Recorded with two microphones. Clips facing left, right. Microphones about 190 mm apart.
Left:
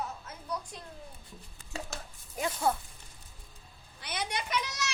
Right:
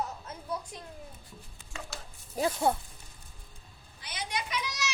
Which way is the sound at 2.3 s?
30° right (ahead or behind).